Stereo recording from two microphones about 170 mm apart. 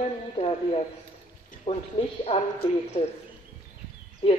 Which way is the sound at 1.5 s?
40° left (ahead or behind).